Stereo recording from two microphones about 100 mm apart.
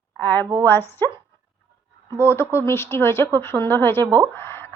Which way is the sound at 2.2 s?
25° left (ahead or behind).